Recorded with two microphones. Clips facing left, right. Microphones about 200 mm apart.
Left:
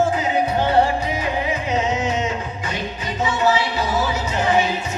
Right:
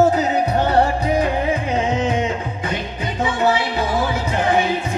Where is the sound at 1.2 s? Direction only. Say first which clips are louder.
Right 4 dB; 55° right (ahead or behind).